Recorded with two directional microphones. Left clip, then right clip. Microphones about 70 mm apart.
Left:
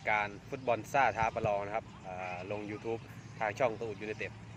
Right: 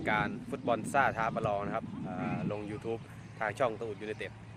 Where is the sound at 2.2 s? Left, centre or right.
Centre.